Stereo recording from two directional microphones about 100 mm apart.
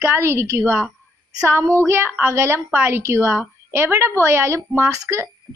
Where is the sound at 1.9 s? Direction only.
20° right (ahead or behind).